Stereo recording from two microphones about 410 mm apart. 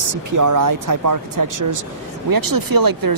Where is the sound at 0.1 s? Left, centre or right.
Right.